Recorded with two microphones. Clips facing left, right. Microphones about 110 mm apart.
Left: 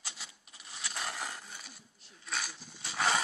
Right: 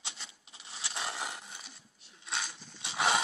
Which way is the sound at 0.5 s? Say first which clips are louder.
Even; 30° right (ahead or behind).